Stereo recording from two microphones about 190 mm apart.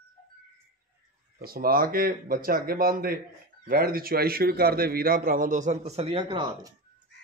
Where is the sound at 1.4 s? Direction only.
50° right (ahead or behind); by 6.7 s 25° right (ahead or behind).